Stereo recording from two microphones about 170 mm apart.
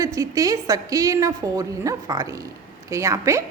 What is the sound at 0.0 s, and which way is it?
A woman's voice, 20° right (ahead or behind).